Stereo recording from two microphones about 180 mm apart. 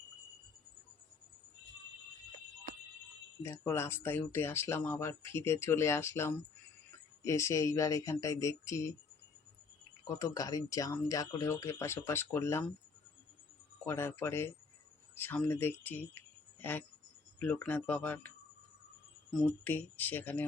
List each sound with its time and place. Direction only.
3.4 s speech: 15° left (ahead or behind)
10.0 s speech: 20° left (ahead or behind)
13.8 s speech: 15° left (ahead or behind)
19.3 s speech: 5° left (ahead or behind)